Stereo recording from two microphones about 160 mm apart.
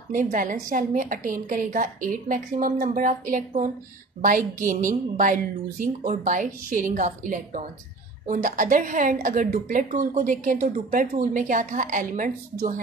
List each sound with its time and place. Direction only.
0.1 s a woman's voice: 55° right (ahead or behind)